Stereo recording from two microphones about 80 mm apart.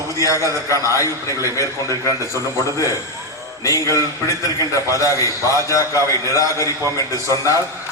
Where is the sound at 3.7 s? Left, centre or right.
Left.